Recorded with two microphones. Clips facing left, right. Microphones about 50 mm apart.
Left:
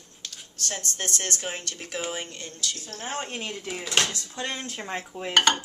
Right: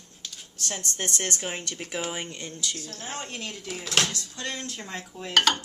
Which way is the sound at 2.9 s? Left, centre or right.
Left.